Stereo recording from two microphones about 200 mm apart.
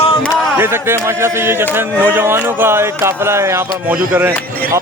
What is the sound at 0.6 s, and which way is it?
Speech, 10° right (ahead or behind).